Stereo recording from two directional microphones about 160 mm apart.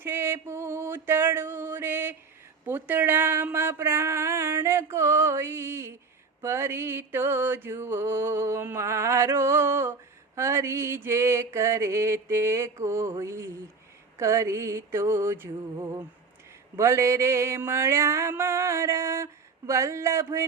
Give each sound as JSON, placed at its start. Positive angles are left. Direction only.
{"t": 0.0, "sound": "music", "side_deg": -15}
{"t": 2.6, "sound": "a sound", "side_deg": -10}
{"t": 6.4, "sound": "mantra", "side_deg": -15}